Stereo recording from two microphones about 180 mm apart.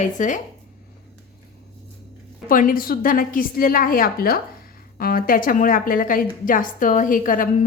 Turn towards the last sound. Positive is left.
turn(degrees=50)  # may be behind; listen again after turning